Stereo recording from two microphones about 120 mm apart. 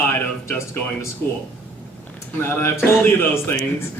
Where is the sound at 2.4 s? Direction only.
20° left (ahead or behind).